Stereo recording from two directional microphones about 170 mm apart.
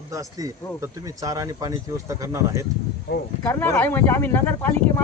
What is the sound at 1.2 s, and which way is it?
Speech, 20° right (ahead or behind).